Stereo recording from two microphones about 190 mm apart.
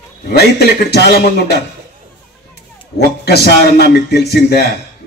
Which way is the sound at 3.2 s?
60° left (ahead or behind).